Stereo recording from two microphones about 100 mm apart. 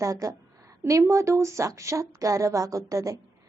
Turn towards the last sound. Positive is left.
turn(degrees=-35)  # may be behind; listen again after turning